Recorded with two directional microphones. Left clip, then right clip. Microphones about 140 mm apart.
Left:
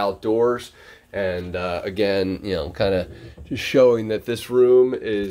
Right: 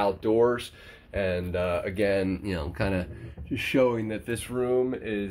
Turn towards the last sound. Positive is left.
turn(degrees=30)  # may be behind; listen again after turning